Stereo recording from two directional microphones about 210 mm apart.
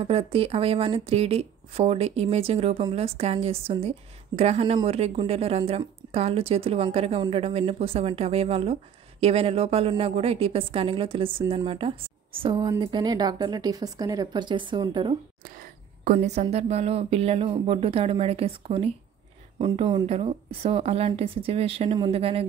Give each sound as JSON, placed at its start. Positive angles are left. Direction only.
{"t": 0.0, "sound": "a woman's voice", "side_deg": -25}
{"t": 16.0, "sound": "a woman's voice", "side_deg": -35}